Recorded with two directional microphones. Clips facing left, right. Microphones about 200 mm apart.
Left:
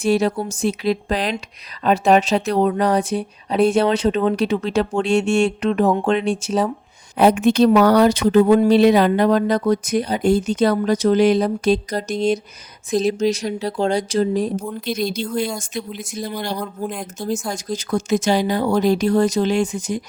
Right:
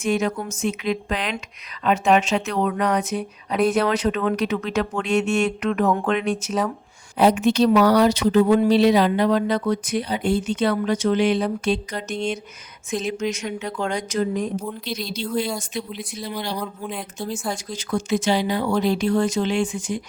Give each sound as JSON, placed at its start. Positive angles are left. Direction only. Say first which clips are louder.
{"t": 0.0, "sound": "speech", "louder": "left 4 dB", "side_deg": 35}
{"t": 7.2, "sound": "speech", "louder": "left 3 dB", "side_deg": 55}
{"t": 14.5, "sound": "speech", "louder": "left 4 dB", "side_deg": 50}